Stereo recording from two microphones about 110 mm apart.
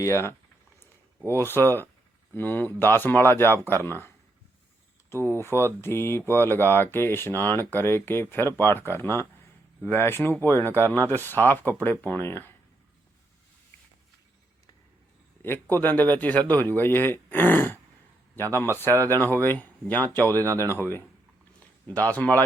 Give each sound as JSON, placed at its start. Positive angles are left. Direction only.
{"t": 0.0, "sound": "speech", "side_deg": 25}
{"t": 15.4, "sound": "a man's voice", "side_deg": 20}